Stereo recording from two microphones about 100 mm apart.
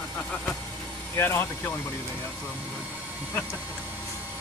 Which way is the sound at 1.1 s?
25° left (ahead or behind).